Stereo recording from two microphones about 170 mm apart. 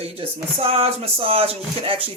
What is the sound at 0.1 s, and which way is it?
Speech, 35° right (ahead or behind).